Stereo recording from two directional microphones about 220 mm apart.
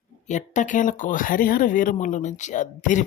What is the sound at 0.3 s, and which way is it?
Speech, 35° left (ahead or behind).